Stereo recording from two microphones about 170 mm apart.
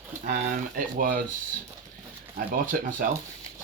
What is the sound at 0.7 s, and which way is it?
Speech, 55° right (ahead or behind).